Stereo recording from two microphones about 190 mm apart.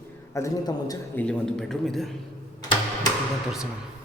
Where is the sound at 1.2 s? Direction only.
Centre (ahead or behind).